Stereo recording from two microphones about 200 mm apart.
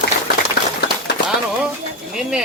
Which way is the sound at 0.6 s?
55° left (ahead or behind).